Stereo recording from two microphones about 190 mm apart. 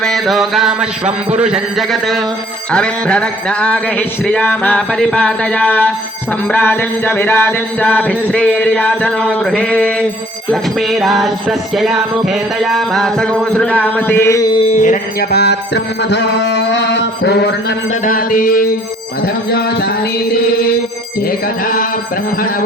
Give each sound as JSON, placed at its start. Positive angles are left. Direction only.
{"t": 0.0, "sound": "music", "side_deg": 0}
{"t": 14.7, "sound": "speech", "side_deg": 40}
{"t": 15.3, "sound": "mantra", "side_deg": 60}
{"t": 19.2, "sound": "music", "side_deg": 55}